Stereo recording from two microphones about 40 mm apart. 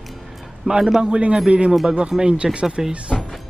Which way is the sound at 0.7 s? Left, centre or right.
Centre.